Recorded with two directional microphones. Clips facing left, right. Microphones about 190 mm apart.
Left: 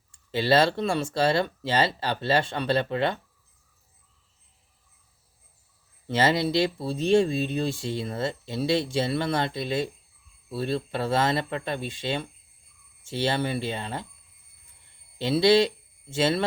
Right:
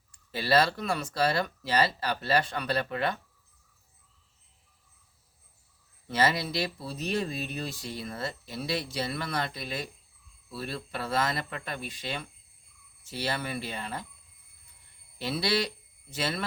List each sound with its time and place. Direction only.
0.1 s speech: 25° left (ahead or behind)
6.1 s speech: 25° left (ahead or behind)
15.2 s speech: 25° left (ahead or behind)